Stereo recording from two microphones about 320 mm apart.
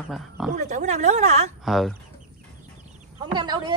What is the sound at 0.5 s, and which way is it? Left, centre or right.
Speech, right.